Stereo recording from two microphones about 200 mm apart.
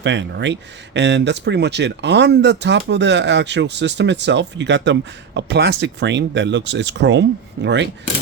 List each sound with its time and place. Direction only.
0.0 s speech: 65° right (ahead or behind)